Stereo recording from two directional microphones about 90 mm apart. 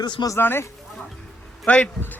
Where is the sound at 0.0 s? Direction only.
50° left (ahead or behind).